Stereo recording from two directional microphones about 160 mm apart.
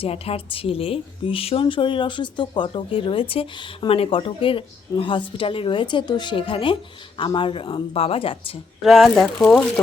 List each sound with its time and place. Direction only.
0.0 s a woman's voice: 35° left (ahead or behind)
8.8 s speech: centre (ahead or behind)